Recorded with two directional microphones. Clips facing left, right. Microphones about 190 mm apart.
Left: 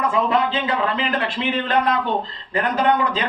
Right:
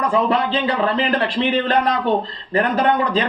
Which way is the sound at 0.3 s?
35° right (ahead or behind).